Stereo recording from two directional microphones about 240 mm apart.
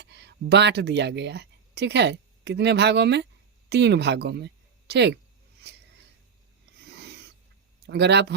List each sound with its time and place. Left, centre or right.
0.0 s speech: right
6.8 s a sound: right
7.9 s speech: right